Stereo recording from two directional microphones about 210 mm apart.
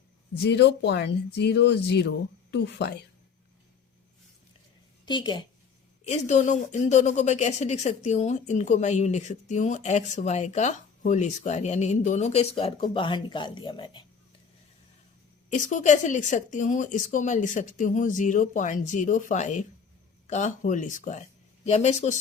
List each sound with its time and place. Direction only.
0.3 s speech: 55° left (ahead or behind)
5.0 s a woman's voice: 20° left (ahead or behind)
6.1 s a woman's voice: 35° left (ahead or behind)
15.5 s a woman's voice: 35° left (ahead or behind)